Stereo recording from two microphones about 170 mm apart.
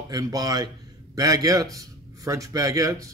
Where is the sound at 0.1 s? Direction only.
20° right (ahead or behind).